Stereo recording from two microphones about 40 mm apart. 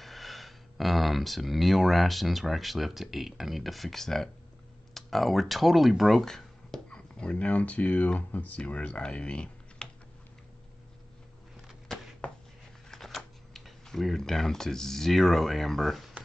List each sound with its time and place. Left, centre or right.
0.0 s speech: centre
6.2 s a sound: centre
6.9 s speech: left
8.5 s speech: left
11.9 s a sound: centre
13.8 s speech: centre